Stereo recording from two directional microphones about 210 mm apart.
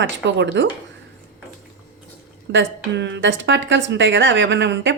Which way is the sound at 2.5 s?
60° right (ahead or behind).